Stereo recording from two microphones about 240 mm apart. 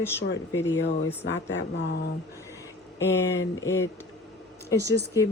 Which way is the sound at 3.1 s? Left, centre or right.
Centre.